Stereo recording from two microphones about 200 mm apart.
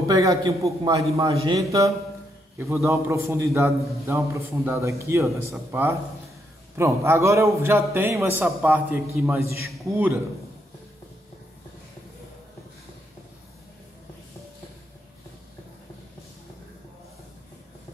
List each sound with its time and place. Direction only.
0.1 s a man's voice: 20° right (ahead or behind)